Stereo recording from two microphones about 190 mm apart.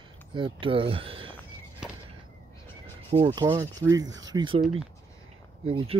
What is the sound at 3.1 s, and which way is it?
Speech, 20° right (ahead or behind).